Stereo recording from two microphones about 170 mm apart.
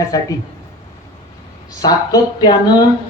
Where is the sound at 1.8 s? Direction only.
20° left (ahead or behind).